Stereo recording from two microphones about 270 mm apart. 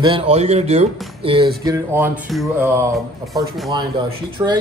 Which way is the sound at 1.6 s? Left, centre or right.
Centre.